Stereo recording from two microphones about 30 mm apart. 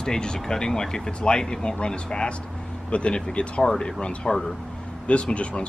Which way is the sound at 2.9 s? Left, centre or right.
Left.